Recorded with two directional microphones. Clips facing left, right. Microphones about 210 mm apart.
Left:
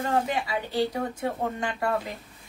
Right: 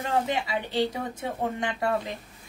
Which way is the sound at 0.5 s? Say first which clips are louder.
Even; 20° right (ahead or behind).